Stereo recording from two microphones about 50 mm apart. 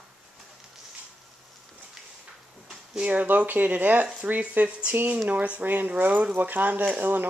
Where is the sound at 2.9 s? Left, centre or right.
Right.